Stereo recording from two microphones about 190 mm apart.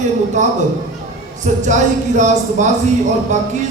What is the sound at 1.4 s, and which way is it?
A man's voice, 40° right (ahead or behind).